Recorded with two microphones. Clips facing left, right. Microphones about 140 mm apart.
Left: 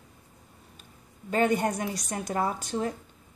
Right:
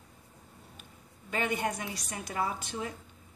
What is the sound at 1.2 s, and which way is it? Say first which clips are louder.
A woman's voice: left 7 dB; 45° left (ahead or behind).